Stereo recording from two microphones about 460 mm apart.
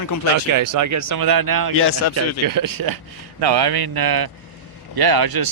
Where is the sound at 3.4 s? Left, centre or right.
Right.